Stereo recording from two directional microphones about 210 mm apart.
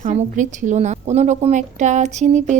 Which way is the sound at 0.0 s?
35° right (ahead or behind).